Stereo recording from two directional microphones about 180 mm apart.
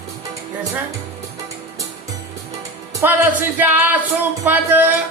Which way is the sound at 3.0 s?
10° right (ahead or behind).